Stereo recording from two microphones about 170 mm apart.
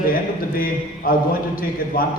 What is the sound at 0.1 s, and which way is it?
A man's voice, 60° left (ahead or behind).